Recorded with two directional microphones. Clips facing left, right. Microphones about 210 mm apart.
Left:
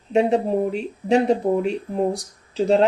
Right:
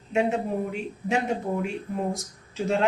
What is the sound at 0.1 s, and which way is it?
Speech, 35° left (ahead or behind).